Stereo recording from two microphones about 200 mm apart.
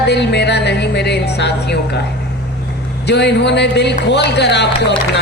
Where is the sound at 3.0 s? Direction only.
60° left (ahead or behind).